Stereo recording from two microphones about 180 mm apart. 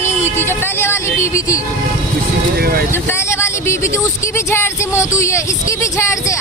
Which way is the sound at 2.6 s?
55° right (ahead or behind).